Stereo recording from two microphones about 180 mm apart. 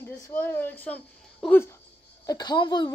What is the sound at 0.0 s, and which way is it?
Speech, 15° left (ahead or behind).